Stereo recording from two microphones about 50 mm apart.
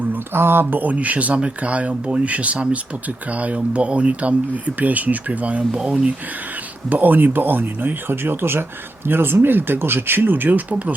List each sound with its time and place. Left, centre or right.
0.1 s speech: right
6.9 s speech: right